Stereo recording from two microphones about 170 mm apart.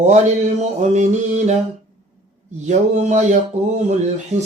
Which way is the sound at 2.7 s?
45° right (ahead or behind).